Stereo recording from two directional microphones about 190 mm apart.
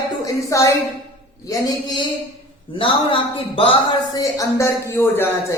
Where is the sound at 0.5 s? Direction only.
15° left (ahead or behind).